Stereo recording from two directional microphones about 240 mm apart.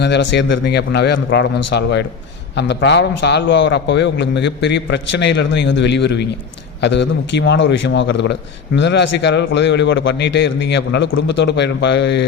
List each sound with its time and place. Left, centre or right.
0.0 s a man's voice: left